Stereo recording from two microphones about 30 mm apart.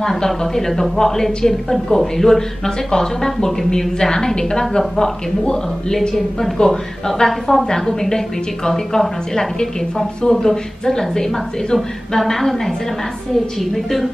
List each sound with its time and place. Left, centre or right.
0.0 s a woman's voice: centre
7.2 s a woman's voice: centre
7.6 s a woman's voice: centre
10.4 s speech: centre